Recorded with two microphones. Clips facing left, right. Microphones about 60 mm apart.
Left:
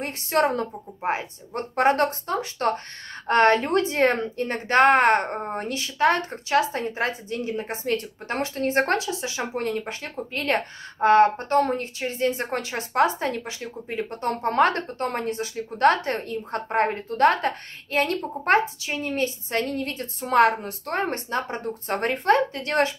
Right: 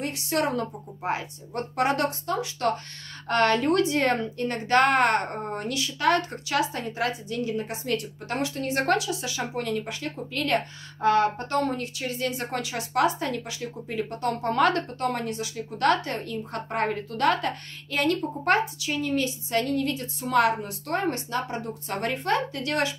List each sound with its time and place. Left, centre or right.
0.0 s speech: left